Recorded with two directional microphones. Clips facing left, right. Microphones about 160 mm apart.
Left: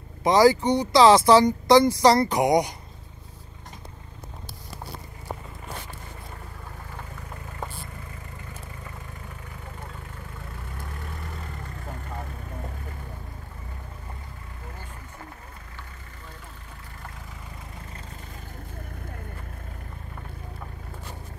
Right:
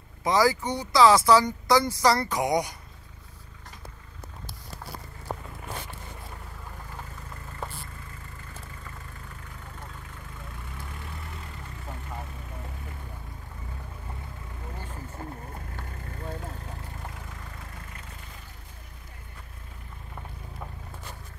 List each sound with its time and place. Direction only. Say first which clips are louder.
0.2 s speech: left 6 dB; 25° left (ahead or behind)